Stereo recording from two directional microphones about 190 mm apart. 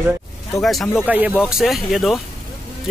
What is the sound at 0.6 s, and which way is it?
Speech, centre (ahead or behind).